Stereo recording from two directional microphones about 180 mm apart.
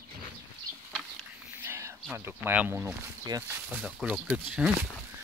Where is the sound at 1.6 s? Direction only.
15° right (ahead or behind).